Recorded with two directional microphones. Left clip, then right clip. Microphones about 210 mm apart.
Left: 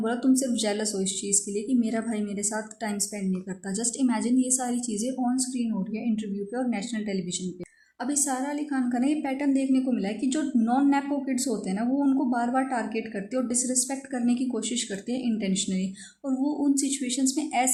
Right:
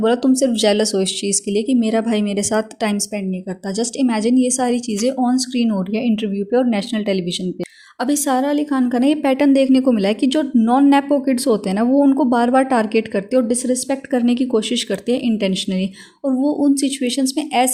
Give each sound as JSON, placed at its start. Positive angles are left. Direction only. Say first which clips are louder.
{"t": 0.0, "sound": "a woman's voice", "louder": "right 10 dB", "side_deg": -35}